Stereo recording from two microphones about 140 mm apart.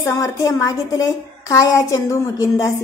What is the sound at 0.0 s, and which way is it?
A woman's voice, 20° left (ahead or behind).